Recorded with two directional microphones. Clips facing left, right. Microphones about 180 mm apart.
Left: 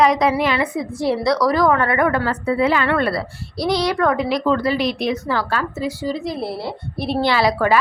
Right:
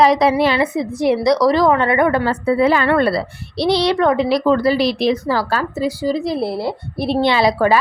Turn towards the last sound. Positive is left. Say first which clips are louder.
# right 3 dB
turn(degrees=-25)  # may be behind; listen again after turning